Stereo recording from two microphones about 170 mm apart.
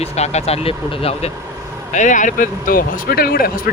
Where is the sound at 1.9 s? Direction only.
45° left (ahead or behind).